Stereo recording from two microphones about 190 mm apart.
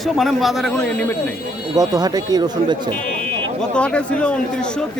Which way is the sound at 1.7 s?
20° right (ahead or behind).